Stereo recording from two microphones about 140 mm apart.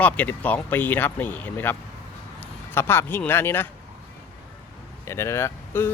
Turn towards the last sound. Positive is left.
turn(degrees=15)  # may be behind; listen again after turning